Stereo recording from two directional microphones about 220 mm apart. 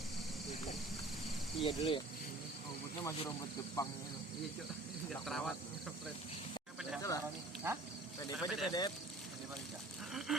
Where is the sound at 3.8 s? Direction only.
15° left (ahead or behind).